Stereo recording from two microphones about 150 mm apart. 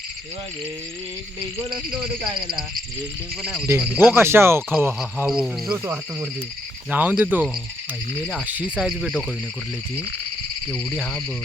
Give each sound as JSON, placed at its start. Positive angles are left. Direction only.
{"t": 3.7, "sound": "speech", "side_deg": -15}
{"t": 5.7, "sound": "speech", "side_deg": -15}